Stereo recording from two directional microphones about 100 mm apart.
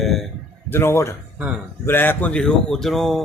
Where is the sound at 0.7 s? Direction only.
25° left (ahead or behind).